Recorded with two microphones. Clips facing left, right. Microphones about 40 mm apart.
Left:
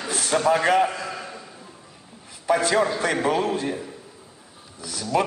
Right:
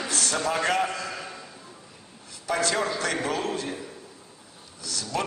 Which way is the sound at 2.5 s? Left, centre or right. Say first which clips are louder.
Left 5 dB; centre.